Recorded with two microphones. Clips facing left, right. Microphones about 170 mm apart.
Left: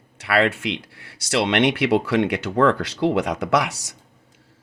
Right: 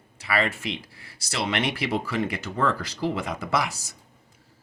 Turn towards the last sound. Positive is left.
turn(degrees=75)  # may be behind; listen again after turning